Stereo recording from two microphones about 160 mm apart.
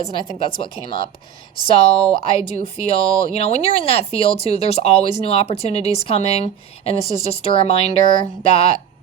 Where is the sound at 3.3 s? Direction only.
40° left (ahead or behind).